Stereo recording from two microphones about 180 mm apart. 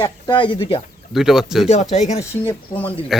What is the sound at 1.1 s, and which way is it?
Speech, centre (ahead or behind).